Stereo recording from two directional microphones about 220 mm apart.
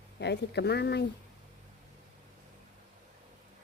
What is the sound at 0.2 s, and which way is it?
Speech, 50° left (ahead or behind).